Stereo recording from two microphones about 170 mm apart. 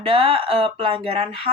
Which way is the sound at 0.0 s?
35° right (ahead or behind).